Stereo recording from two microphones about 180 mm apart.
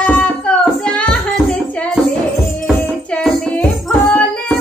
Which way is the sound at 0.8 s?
5° left (ahead or behind).